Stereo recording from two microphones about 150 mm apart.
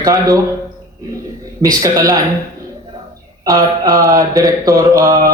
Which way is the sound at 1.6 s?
25° right (ahead or behind).